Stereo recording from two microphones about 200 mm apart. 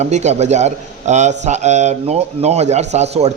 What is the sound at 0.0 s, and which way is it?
A man's voice, 35° right (ahead or behind).